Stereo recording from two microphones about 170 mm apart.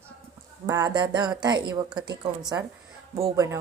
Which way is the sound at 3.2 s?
20° right (ahead or behind).